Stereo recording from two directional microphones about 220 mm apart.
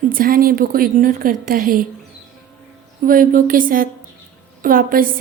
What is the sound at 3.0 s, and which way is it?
A woman's voice, 40° right (ahead or behind).